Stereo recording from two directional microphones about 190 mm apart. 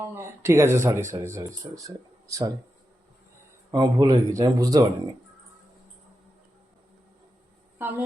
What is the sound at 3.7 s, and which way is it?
Speech, 20° right (ahead or behind).